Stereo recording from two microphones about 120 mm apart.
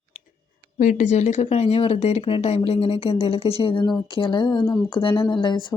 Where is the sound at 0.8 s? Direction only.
90° left.